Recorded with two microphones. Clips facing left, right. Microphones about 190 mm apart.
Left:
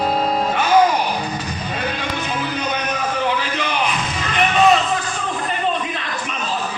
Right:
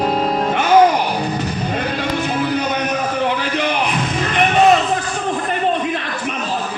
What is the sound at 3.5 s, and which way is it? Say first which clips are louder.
Music: right 3 dB; 55° right (ahead or behind).